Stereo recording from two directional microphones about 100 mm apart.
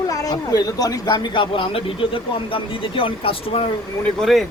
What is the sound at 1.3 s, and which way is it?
Speech, 60° left (ahead or behind).